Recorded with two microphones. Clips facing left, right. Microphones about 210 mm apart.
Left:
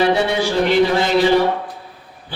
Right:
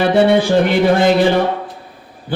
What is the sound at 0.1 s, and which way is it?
Speech, 55° right (ahead or behind).